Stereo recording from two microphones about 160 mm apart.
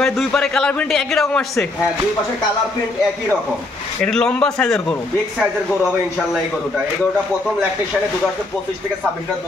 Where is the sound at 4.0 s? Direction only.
5° left (ahead or behind).